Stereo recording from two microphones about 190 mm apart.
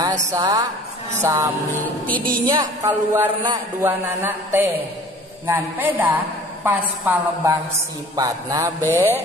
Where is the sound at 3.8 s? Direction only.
10° right (ahead or behind).